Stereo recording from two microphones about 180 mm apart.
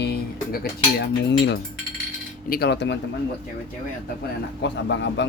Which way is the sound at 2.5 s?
65° left (ahead or behind).